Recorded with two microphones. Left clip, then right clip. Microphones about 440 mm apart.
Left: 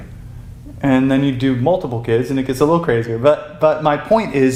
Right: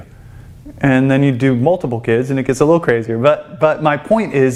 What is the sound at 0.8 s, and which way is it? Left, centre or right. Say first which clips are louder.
Speech: right 2 dB; right.